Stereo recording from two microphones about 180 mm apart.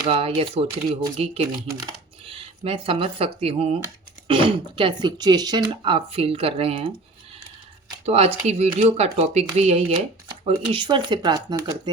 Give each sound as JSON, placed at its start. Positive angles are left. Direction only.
{"t": 0.1, "sound": "speech", "side_deg": -30}
{"t": 8.0, "sound": "speech", "side_deg": -35}